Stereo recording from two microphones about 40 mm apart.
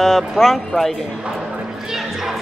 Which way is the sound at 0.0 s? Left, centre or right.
Centre.